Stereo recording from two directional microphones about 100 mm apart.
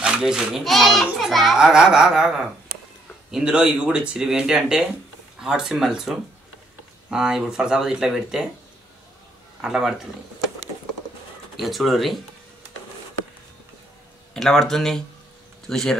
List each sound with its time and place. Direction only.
0.0 s speech: 5° right (ahead or behind)
9.6 s speech: 5° right (ahead or behind)
11.5 s speech: centre (ahead or behind)
14.3 s speech: 5° left (ahead or behind)